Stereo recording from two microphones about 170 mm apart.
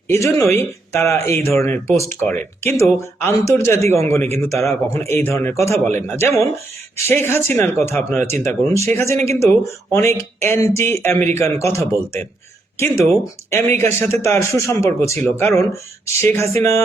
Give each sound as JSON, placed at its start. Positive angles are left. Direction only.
{"t": 0.1, "sound": "speech", "side_deg": 15}